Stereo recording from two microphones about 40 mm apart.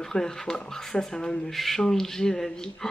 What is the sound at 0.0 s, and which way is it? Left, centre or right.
Speech, centre.